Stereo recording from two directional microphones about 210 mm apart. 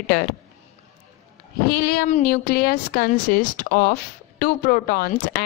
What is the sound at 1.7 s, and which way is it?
A woman's voice, 45° left (ahead or behind).